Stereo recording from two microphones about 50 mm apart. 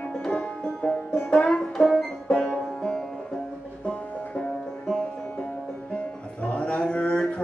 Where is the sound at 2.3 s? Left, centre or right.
Centre.